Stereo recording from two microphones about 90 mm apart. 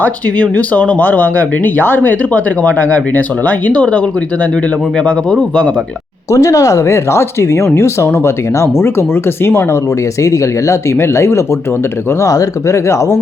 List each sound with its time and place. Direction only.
0.0 s speech: 15° left (ahead or behind)
6.3 s speech: 40° left (ahead or behind)